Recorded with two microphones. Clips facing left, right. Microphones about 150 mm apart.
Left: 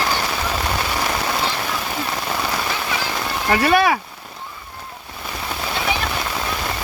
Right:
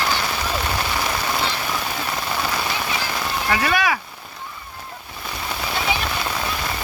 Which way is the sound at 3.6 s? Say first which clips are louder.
Left 7 dB; 35° left (ahead or behind).